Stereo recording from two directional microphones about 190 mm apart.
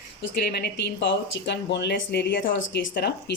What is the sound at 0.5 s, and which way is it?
Speech, 60° left (ahead or behind).